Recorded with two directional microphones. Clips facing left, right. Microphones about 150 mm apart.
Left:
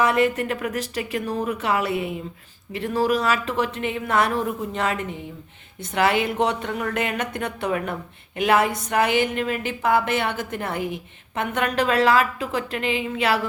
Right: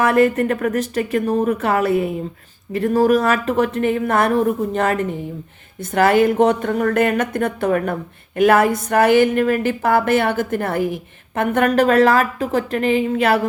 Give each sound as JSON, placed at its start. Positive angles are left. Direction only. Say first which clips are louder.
{"t": 0.0, "sound": "a woman's voice", "louder": "right 5 dB", "side_deg": -50}